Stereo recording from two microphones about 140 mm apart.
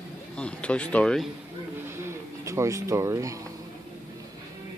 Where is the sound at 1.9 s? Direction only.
20° right (ahead or behind).